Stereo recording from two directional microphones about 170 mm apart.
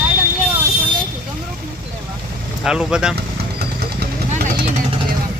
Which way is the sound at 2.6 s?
5° right (ahead or behind).